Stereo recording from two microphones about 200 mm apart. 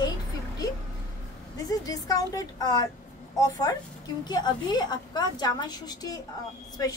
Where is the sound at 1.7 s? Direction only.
20° left (ahead or behind).